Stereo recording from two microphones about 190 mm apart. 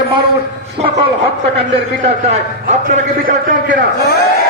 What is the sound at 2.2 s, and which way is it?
A man's voice, 40° right (ahead or behind).